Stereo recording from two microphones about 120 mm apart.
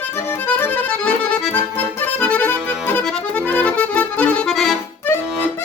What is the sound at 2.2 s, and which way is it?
Accordion, 15° left (ahead or behind).